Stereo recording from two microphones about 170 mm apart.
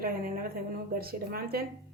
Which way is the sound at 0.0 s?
55° right (ahead or behind).